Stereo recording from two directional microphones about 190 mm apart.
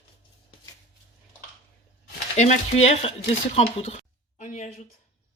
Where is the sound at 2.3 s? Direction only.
35° left (ahead or behind).